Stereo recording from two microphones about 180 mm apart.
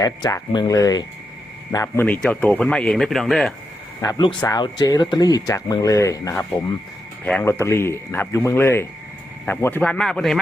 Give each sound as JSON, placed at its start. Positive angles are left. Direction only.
{"t": 0.0, "sound": "speech", "side_deg": 20}
{"t": 2.0, "sound": "speech", "side_deg": 5}
{"t": 4.0, "sound": "speech", "side_deg": 20}